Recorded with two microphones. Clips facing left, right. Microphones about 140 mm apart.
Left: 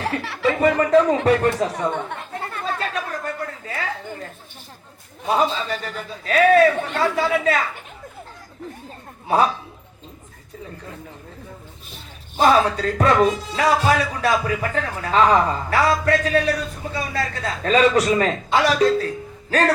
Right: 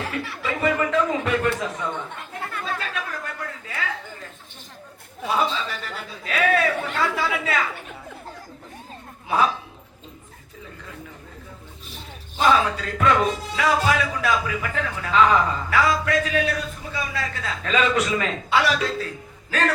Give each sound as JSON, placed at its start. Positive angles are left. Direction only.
{"t": 0.4, "sound": "a man's voice", "side_deg": 35}
{"t": 2.6, "sound": "chatter", "side_deg": 35}
{"t": 3.7, "sound": "a sound", "side_deg": 40}
{"t": 5.3, "sound": "a man's voice", "side_deg": 40}
{"t": 9.2, "sound": "speech", "side_deg": 40}
{"t": 12.4, "sound": "a man's voice", "side_deg": 40}